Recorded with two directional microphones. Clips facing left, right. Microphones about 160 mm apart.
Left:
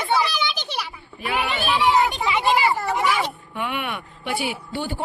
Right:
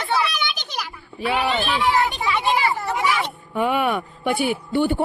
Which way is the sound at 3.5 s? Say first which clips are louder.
Right 10 dB; 40° right (ahead or behind).